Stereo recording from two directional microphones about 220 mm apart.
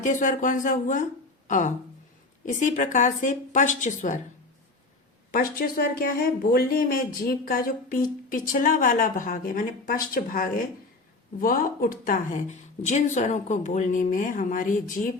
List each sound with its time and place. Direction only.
0.0 s speech: 35° left (ahead or behind)
5.3 s speech: 40° left (ahead or behind)